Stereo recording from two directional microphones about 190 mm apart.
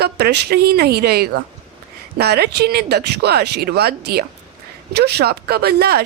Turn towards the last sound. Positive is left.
turn(degrees=-55)  # may be behind; listen again after turning